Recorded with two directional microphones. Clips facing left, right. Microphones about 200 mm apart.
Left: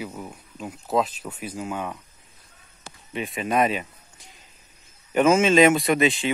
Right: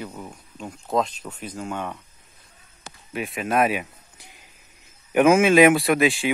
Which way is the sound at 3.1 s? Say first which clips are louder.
Right 1 dB; 5° right (ahead or behind).